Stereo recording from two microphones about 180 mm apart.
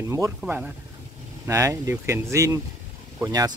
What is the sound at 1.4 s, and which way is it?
Speech, 15° right (ahead or behind).